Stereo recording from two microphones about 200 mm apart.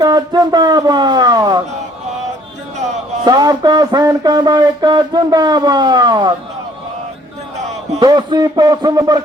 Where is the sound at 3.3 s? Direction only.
20° right (ahead or behind).